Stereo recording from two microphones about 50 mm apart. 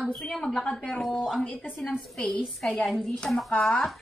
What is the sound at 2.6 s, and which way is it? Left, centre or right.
Speech, left.